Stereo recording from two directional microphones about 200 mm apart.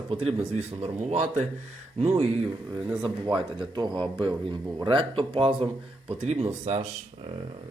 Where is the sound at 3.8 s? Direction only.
25° right (ahead or behind).